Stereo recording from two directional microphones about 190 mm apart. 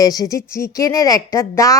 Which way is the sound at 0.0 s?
20° left (ahead or behind).